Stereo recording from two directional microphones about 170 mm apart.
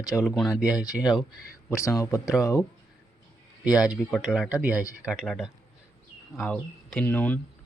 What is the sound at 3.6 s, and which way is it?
Speech, 5° right (ahead or behind).